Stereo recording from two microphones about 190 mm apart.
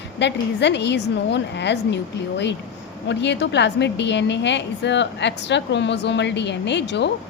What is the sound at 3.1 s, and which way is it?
A woman's voice, 65° left (ahead or behind).